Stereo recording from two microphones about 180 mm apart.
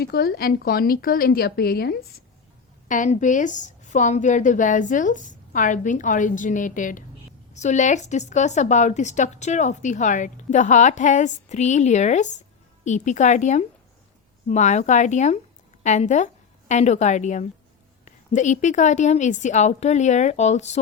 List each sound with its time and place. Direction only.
0.0 s speech: 60° left (ahead or behind)
2.9 s a woman's voice: 45° left (ahead or behind)